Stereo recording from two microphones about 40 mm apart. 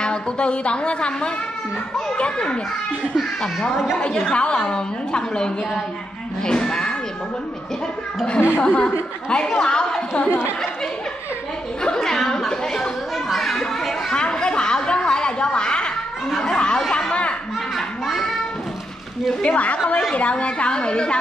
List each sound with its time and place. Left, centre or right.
0.0 s a woman's voice: left
3.7 s a woman's voice: centre
4.0 s speech: left
8.6 s speech: left
11.8 s a sound: centre
13.3 s chatter: centre
14.1 s a sound: left
16.5 s chatter: left
17.1 s a sound: left
18.0 s a child's voice: centre
19.4 s a woman's voice: left